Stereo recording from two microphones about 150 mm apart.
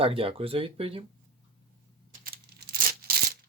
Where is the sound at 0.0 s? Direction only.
40° right (ahead or behind).